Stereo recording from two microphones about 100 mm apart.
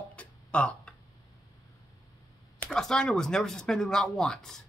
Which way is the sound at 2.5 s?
5° left (ahead or behind).